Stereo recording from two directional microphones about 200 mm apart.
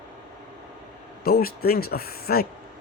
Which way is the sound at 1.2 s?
50° left (ahead or behind).